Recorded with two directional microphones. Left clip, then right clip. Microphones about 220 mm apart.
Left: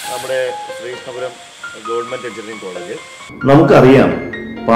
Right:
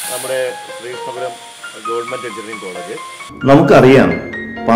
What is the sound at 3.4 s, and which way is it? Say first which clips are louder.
Speech: even; 35° right (ahead or behind).